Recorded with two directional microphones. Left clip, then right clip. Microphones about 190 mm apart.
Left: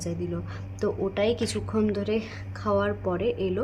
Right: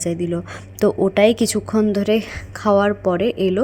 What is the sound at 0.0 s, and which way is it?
A woman's voice, 40° right (ahead or behind).